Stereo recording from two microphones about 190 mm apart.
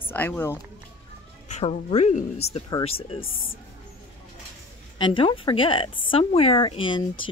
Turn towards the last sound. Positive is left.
turn(degrees=25)  # may be behind; listen again after turning